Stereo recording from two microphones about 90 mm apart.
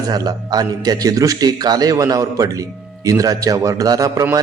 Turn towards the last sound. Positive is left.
turn(degrees=-40)  # may be behind; listen again after turning